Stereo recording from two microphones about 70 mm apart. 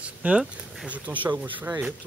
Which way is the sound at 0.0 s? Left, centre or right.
Centre.